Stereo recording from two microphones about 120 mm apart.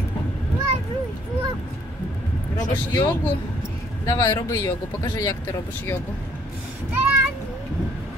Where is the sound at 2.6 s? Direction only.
35° left (ahead or behind).